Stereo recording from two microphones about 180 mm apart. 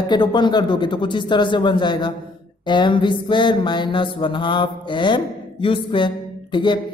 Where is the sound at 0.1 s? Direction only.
25° left (ahead or behind).